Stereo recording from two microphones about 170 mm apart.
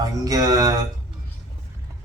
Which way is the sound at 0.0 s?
20° right (ahead or behind).